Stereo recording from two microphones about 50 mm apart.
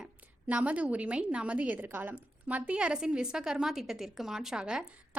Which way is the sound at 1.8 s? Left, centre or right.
Right.